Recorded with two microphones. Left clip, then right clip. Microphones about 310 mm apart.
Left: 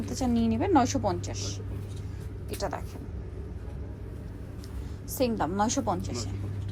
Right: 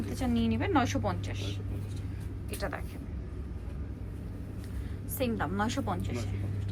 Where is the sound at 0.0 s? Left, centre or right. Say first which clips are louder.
Left 3 dB; centre.